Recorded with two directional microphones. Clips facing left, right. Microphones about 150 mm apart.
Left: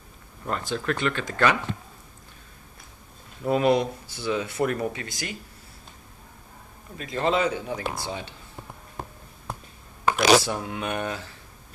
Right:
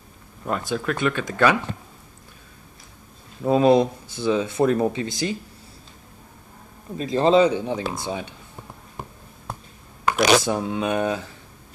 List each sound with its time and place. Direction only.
0.5 s speech: 10° right (ahead or behind)
3.4 s speech: 25° right (ahead or behind)
7.0 s speech: 30° right (ahead or behind)
10.4 s speech: 20° right (ahead or behind)